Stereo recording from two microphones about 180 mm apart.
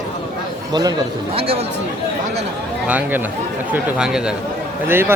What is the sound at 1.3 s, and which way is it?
Speech, 30° right (ahead or behind).